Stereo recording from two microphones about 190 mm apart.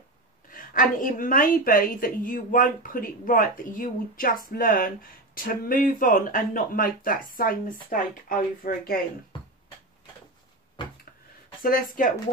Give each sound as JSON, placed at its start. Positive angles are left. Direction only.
{"t": 0.5, "sound": "a woman's voice", "side_deg": 45}
{"t": 10.8, "sound": "a sound", "side_deg": 25}
{"t": 11.6, "sound": "a woman's voice", "side_deg": 45}